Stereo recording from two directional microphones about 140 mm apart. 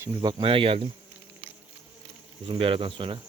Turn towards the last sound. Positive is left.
turn(degrees=-35)  # may be behind; listen again after turning